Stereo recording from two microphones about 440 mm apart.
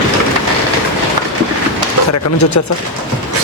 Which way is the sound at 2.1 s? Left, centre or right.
Left.